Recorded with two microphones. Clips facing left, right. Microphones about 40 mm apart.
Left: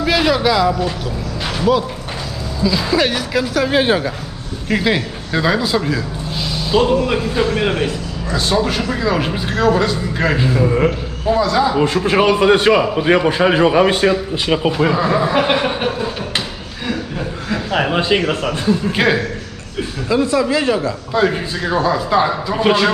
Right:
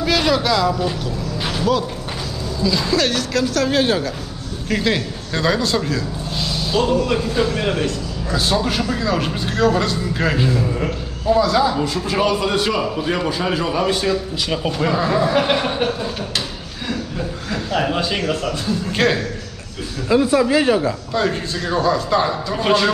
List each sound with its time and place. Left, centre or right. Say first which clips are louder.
0.0 s a man's voice: left 3 dB; centre
6.8 s a man's voice: left 2 dB; left
8.3 s a man's voice: left 2 dB; centre
8.8 s a man's voice: left 2 dB; centre
10.5 s a man's voice: left 6 dB; left
11.4 s a man's voice: left 1 dB; centre
11.8 s a man's voice: left 5 dB; left
18.9 s a man's voice: even; centre
20.1 s speech: even; centre
21.1 s a man's voice: left 7 dB; centre